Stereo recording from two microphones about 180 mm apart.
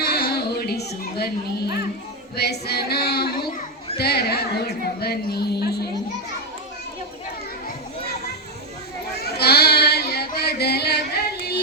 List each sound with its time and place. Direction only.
0.0 s music: 60° left (ahead or behind)
2.3 s a woman's voice: 65° left (ahead or behind)
9.4 s a sound: 65° left (ahead or behind)